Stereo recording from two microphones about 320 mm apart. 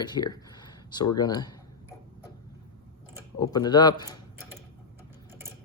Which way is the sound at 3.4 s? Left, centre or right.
Centre.